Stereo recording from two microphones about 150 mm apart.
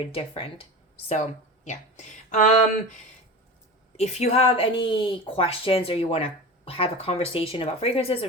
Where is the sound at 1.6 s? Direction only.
50° left (ahead or behind).